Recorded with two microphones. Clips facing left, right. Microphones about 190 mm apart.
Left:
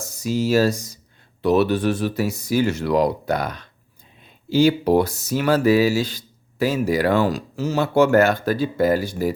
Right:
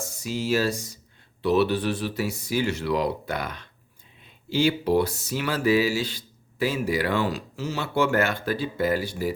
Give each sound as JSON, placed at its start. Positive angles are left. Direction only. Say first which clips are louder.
{"t": 0.0, "sound": "speech", "louder": "left 7 dB", "side_deg": 40}